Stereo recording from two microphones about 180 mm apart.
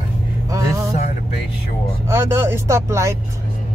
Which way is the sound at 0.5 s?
20° right (ahead or behind).